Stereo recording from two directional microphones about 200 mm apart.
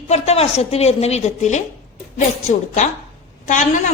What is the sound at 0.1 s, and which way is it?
A woman's voice, 30° left (ahead or behind).